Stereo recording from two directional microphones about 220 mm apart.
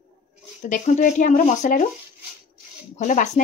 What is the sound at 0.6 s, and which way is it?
Speech, 35° left (ahead or behind).